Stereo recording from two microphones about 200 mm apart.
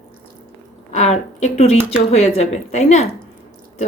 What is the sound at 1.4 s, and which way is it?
A woman's voice, 35° left (ahead or behind).